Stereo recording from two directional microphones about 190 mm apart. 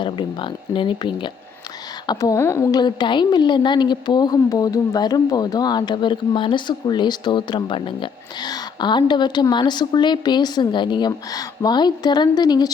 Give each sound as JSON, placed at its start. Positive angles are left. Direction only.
{"t": 0.0, "sound": "a woman's voice", "side_deg": 25}